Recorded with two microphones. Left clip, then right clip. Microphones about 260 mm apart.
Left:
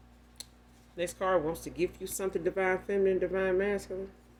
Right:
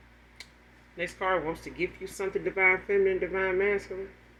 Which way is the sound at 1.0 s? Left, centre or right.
Left.